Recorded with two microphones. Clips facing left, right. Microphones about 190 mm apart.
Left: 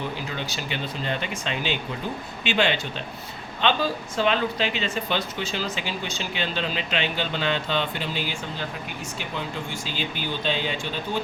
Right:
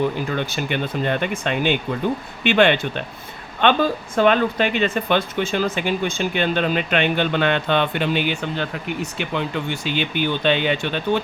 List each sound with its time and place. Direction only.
0.3 s speech: 55° right (ahead or behind)